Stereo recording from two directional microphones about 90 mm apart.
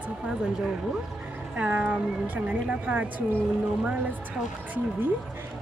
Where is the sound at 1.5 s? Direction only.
15° right (ahead or behind).